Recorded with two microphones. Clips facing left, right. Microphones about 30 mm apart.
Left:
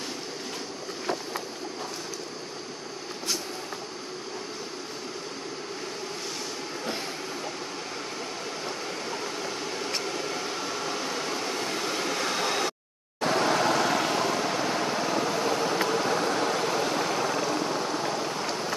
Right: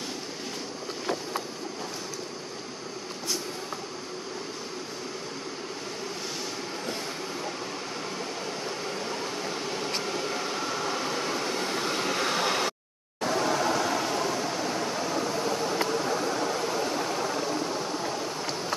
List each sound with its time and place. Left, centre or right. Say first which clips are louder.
10.0 s a sound: right 1 dB; centre
13.3 s vehicle: left 2 dB; left
15.7 s vehicle: left 2 dB; left